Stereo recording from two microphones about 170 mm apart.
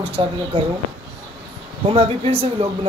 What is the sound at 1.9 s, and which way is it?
Speech, 35° right (ahead or behind).